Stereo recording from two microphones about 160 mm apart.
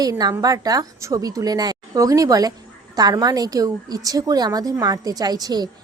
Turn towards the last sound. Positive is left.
turn(degrees=-25)  # may be behind; listen again after turning